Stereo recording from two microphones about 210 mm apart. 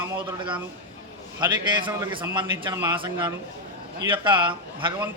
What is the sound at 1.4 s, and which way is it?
A man's voice, 20° right (ahead or behind).